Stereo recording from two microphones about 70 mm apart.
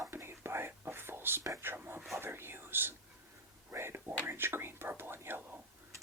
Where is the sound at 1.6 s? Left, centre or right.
Right.